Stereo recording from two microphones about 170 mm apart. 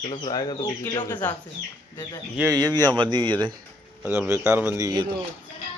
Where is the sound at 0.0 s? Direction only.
30° left (ahead or behind).